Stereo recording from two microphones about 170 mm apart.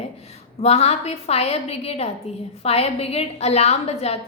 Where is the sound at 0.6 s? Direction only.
40° left (ahead or behind).